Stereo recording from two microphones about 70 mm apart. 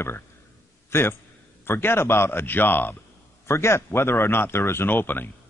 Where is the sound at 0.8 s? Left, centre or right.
Left.